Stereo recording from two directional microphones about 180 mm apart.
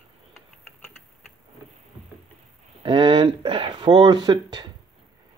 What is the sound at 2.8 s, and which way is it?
Speech, 25° right (ahead or behind).